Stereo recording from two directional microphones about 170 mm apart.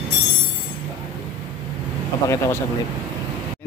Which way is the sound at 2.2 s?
15° left (ahead or behind).